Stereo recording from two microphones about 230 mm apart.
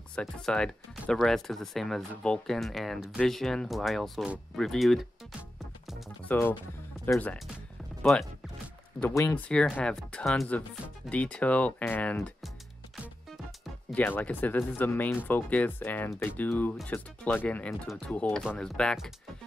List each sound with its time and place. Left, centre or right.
0.1 s speech: centre
5.9 s music: centre
7.1 s speech: centre
13.8 s speech: centre